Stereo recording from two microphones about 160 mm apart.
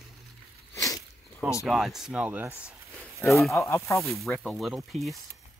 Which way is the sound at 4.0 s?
Centre (ahead or behind).